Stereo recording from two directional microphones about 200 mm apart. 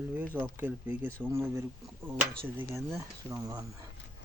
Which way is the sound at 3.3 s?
15° right (ahead or behind).